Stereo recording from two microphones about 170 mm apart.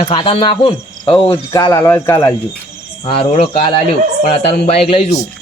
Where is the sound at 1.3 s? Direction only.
20° left (ahead or behind).